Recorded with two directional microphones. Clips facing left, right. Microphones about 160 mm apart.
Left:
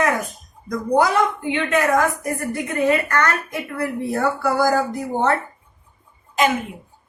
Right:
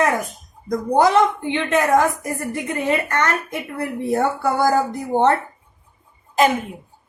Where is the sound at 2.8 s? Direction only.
25° right (ahead or behind).